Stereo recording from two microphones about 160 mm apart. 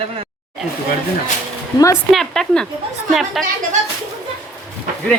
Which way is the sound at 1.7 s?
20° left (ahead or behind).